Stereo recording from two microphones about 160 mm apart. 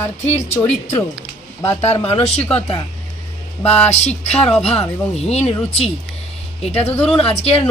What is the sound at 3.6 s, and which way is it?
Speech, 10° left (ahead or behind).